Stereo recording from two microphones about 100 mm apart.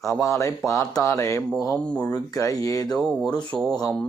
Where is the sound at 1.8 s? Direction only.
10° left (ahead or behind).